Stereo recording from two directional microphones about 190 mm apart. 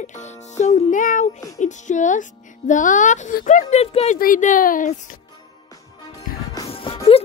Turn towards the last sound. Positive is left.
turn(degrees=30)  # may be behind; listen again after turning